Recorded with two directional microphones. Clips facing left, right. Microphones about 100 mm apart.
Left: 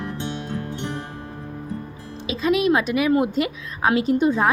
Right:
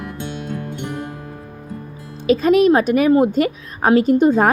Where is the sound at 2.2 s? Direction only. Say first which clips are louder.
Right 7 dB; 45° right (ahead or behind).